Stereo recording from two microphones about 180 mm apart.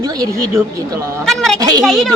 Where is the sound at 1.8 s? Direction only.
Centre (ahead or behind).